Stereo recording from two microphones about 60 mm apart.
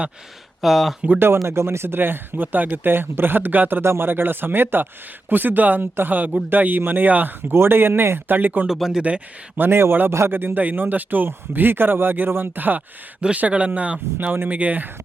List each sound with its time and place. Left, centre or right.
0.6 s speech: centre
1.5 s speech: right
8.6 s speech: centre
9.6 s speech: right